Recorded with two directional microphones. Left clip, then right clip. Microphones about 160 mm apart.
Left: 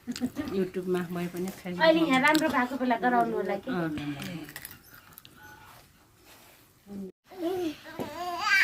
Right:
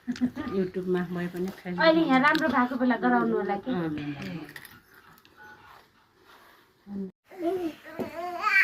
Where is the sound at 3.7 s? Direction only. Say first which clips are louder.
Right 1 dB; 45° left (ahead or behind).